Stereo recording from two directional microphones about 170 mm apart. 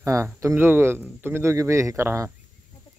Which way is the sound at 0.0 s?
20° right (ahead or behind).